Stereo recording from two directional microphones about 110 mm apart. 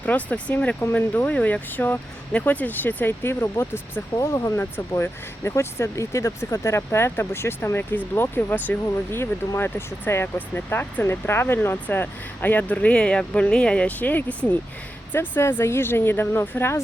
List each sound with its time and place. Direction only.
0.0 s speech: 15° left (ahead or behind)